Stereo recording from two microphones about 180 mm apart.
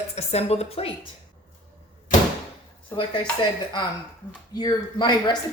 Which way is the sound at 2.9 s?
25° left (ahead or behind).